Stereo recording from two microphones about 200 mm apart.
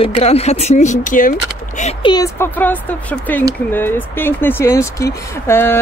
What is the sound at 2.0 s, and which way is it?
Speech, 15° left (ahead or behind).